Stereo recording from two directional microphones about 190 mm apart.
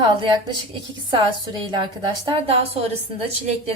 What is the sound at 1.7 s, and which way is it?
A woman's voice, 25° right (ahead or behind).